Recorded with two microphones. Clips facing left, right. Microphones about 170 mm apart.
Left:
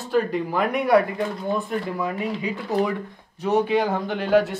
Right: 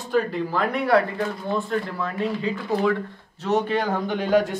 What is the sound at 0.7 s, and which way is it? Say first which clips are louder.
Speech: left 2 dB; 20° left (ahead or behind).